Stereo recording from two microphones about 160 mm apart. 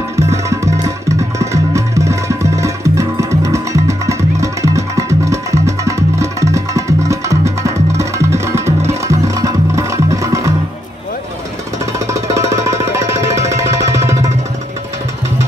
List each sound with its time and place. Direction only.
0.1 s music: 20° right (ahead or behind)
12.1 s music: 20° right (ahead or behind)